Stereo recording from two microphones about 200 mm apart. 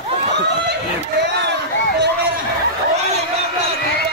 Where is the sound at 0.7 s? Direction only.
55° right (ahead or behind).